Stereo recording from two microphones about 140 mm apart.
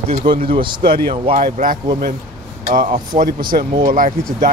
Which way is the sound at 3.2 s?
90° right.